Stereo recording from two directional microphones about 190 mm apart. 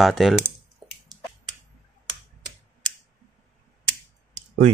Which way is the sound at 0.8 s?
Centre (ahead or behind).